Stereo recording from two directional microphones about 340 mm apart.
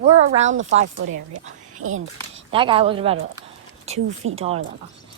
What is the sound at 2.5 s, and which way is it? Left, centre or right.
Speech, centre.